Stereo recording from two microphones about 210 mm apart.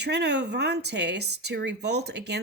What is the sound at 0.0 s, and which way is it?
Speech, 50° right (ahead or behind).